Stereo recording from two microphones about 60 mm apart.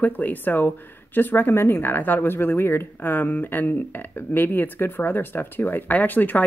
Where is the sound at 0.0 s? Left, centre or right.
Left.